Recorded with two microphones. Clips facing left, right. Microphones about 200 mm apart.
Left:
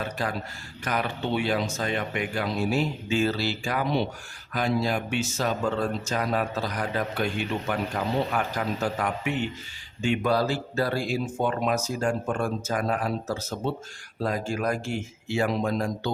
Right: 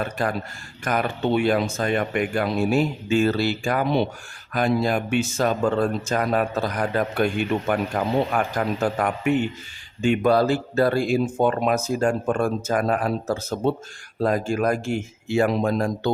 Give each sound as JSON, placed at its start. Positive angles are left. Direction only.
{"t": 0.0, "sound": "speech", "side_deg": -50}